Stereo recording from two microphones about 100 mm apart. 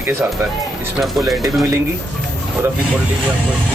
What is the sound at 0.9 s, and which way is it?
Speech, centre (ahead or behind).